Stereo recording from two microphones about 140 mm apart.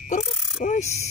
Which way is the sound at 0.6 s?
70° left (ahead or behind).